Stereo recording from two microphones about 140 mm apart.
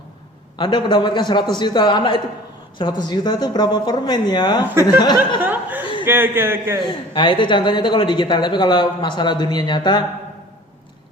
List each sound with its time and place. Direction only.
0.6 s speech: 35° left (ahead or behind)
5.4 s chuckle: 15° right (ahead or behind)
5.8 s chuckle: 35° left (ahead or behind)
6.1 s speech: 15° right (ahead or behind)
6.8 s speech: 35° left (ahead or behind)